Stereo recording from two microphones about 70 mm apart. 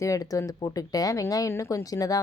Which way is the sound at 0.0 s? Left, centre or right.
Left.